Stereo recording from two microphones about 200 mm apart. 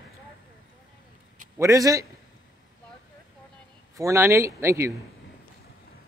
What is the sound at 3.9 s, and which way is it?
Speech, 15° right (ahead or behind).